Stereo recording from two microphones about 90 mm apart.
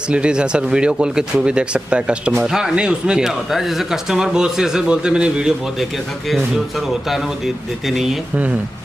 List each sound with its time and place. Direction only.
0.1 s speech: 10° right (ahead or behind)